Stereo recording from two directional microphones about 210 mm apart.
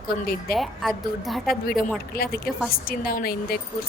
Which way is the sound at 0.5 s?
Centre (ahead or behind).